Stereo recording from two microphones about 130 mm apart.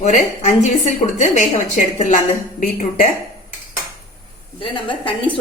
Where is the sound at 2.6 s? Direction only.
85° left.